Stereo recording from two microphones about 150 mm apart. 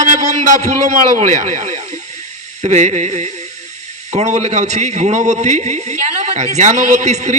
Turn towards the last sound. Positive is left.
turn(degrees=-50)  # may be behind; listen again after turning